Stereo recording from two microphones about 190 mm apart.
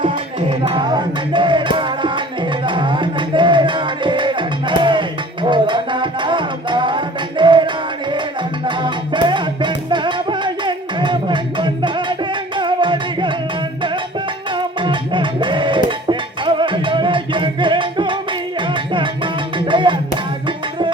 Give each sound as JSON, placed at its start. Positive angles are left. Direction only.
{"t": 0.0, "sound": "music", "side_deg": -25}
{"t": 14.5, "sound": "music", "side_deg": -25}